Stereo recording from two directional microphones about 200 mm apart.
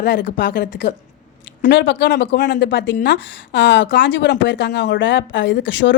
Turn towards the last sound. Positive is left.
turn(degrees=65)  # may be behind; listen again after turning